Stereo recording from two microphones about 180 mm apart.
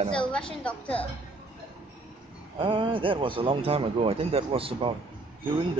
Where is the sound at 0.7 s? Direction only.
10° left (ahead or behind).